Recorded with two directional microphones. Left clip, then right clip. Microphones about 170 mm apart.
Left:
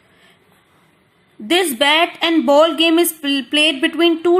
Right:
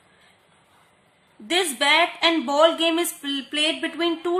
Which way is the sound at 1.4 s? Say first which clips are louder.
Left 6 dB; 30° left (ahead or behind).